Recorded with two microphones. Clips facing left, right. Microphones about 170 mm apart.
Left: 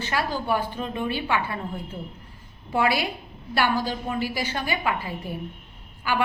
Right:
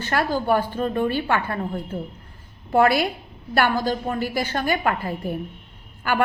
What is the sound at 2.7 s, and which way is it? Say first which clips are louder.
A woman's voice: right 5 dB; 50° right (ahead or behind).